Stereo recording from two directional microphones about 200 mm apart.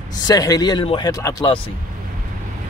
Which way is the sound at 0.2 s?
20° left (ahead or behind).